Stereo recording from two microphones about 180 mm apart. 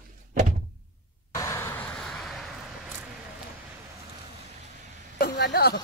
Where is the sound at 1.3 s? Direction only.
15° left (ahead or behind).